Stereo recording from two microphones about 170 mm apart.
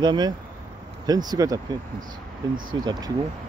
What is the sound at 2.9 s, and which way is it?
Speech, 25° right (ahead or behind).